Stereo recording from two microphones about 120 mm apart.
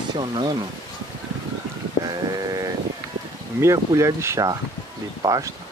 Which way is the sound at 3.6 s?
25° right (ahead or behind).